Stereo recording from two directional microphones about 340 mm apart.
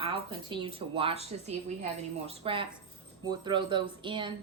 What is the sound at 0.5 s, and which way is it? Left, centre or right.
A woman's voice, centre.